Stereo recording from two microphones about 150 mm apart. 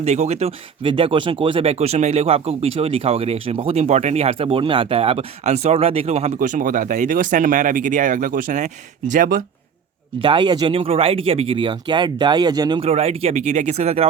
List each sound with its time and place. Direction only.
0.0 s speech: 50° right (ahead or behind)
10.2 s speech: 35° right (ahead or behind)
12.9 s speech: 45° right (ahead or behind)